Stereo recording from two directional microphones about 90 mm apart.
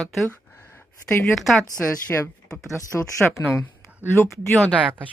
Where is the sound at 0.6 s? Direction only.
30° left (ahead or behind).